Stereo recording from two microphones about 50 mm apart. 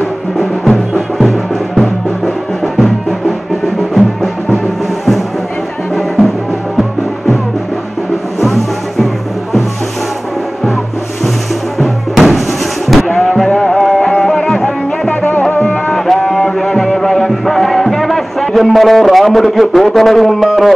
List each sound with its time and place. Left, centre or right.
0.7 s music: centre
11.8 s music: centre
15.0 s music: left
15.7 s music: centre